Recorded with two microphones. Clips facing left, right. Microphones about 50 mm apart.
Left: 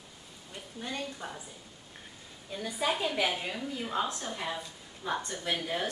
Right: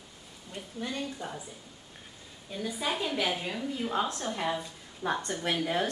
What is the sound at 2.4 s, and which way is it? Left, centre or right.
A woman's voice, centre.